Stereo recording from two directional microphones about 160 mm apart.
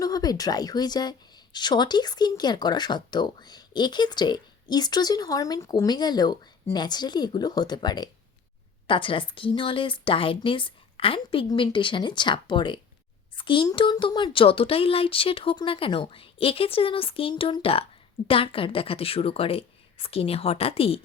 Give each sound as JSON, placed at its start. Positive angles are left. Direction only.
{"t": 0.0, "sound": "speech", "side_deg": 25}